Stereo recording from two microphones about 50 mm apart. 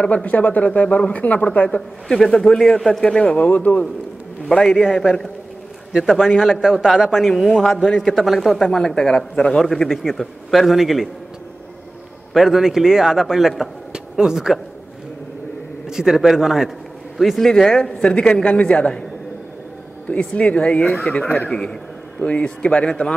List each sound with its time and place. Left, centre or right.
0.0 s speech: left
2.0 s speech: centre
3.3 s a man's voice: left
4.5 s speech: centre
6.1 s a man's voice: centre
8.1 s a man's voice: centre
8.6 s speech: centre
9.6 s a man's voice: centre
12.4 s a man's voice: centre
15.9 s a man's voice: centre
20.1 s speech: left